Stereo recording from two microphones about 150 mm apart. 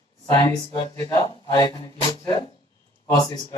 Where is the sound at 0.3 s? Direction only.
20° left (ahead or behind).